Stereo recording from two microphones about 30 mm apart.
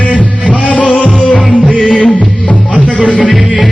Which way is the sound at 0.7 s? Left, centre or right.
Left.